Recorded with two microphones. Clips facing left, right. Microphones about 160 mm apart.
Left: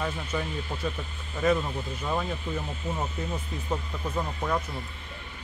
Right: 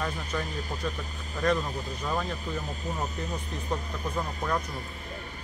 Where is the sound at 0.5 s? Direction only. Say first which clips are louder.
Left 1 dB; 40° right (ahead or behind).